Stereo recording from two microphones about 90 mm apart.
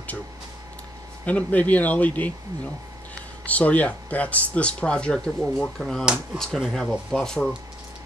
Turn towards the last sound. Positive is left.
turn(degrees=5)  # may be behind; listen again after turning